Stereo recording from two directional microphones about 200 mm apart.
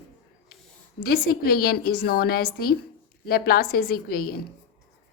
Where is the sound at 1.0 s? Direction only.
50° left (ahead or behind).